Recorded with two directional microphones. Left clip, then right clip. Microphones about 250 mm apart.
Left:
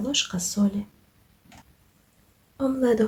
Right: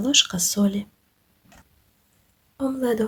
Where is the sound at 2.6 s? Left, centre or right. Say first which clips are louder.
Left 1 dB; centre.